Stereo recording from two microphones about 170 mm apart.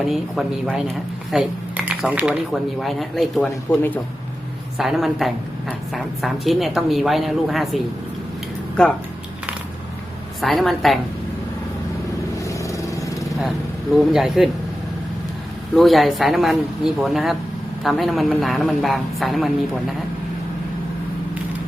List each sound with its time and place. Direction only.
0.1 s a woman's voice: 5° right (ahead or behind)
10.4 s a woman's voice: centre (ahead or behind)
12.4 s vehicle: 20° left (ahead or behind)
14.1 s a woman's voice: centre (ahead or behind)
15.7 s a woman's voice: centre (ahead or behind)